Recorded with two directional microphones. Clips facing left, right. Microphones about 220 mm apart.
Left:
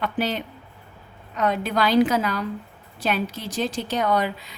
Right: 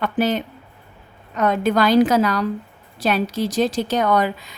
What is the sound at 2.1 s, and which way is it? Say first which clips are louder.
A woman's voice: right 6 dB; 80° right.